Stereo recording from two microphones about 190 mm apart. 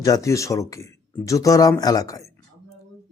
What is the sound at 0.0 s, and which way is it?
A man's voice, 15° left (ahead or behind).